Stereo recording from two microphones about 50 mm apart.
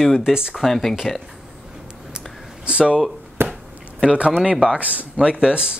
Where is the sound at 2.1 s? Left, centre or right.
Centre.